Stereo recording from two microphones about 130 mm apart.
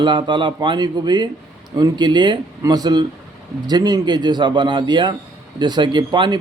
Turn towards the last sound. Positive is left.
turn(degrees=-35)  # may be behind; listen again after turning